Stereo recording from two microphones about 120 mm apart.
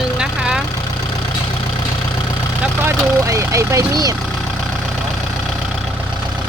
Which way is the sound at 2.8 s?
25° right (ahead or behind).